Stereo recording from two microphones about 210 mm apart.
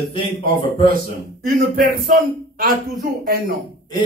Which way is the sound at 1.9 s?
45° right (ahead or behind).